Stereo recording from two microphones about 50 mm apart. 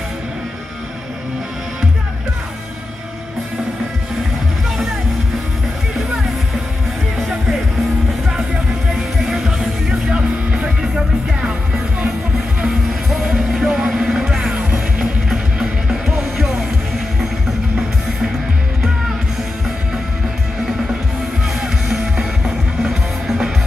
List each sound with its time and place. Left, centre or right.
7.2 s music: centre
9.2 s music: centre
10.0 s music: right
13.1 s music: centre
21.5 s music: centre